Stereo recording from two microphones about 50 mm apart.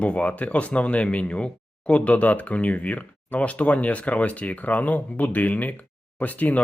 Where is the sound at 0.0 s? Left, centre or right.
Left.